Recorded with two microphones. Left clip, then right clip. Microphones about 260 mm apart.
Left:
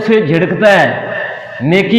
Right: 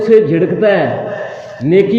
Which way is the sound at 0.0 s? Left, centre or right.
Left.